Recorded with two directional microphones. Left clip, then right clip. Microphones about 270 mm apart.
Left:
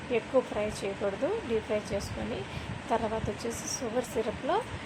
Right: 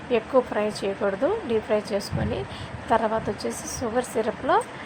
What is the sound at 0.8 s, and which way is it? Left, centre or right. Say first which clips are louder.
Speech: right 8 dB; centre.